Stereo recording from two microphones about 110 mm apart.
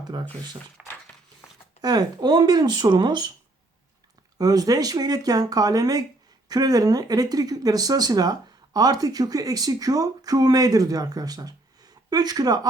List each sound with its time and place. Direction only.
0.0 s speech: 40° right (ahead or behind)
0.8 s a sound: 10° right (ahead or behind)
1.8 s speech: 35° right (ahead or behind)
4.4 s speech: 35° right (ahead or behind)